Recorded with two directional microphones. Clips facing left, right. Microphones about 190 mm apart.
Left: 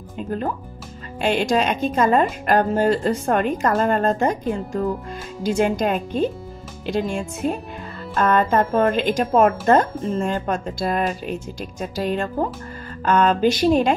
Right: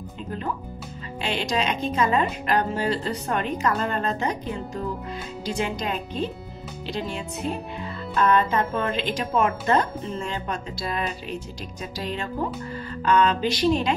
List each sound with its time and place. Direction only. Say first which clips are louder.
1.2 s a woman's voice: left 7 dB; 45° left (ahead or behind)